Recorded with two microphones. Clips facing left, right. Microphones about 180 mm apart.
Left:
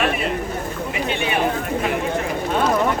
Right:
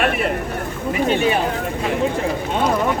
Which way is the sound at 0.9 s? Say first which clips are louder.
Right 7 dB; 45° right (ahead or behind).